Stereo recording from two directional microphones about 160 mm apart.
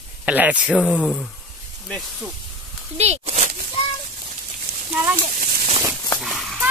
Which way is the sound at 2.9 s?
40° right (ahead or behind).